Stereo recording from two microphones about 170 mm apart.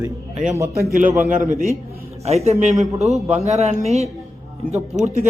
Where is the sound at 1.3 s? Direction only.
50° right (ahead or behind).